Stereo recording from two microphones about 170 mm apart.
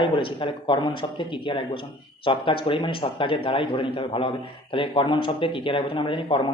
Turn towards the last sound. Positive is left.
turn(degrees=30)  # may be behind; listen again after turning